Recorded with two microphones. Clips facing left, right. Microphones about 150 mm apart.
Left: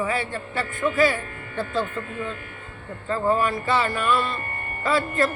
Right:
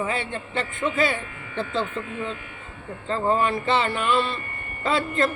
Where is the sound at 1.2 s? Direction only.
45° left (ahead or behind).